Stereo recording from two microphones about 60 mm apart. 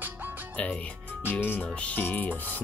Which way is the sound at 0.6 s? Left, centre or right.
Left.